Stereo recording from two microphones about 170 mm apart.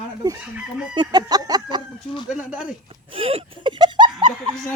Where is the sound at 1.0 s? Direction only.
25° right (ahead or behind).